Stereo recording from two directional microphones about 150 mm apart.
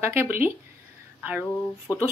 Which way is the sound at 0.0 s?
15° right (ahead or behind).